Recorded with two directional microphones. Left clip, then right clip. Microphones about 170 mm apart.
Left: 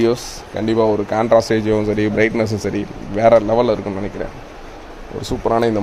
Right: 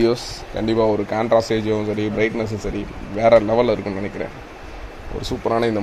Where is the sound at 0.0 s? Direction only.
5° left (ahead or behind); by 2.8 s 25° left (ahead or behind).